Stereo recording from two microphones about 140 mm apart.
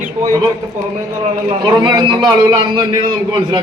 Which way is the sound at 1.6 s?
30° right (ahead or behind).